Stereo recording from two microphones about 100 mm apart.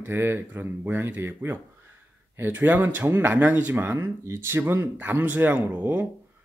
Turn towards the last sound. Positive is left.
turn(degrees=-20)  # may be behind; listen again after turning